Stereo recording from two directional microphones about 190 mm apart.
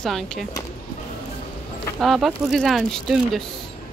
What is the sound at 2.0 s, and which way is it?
Speech, centre (ahead or behind).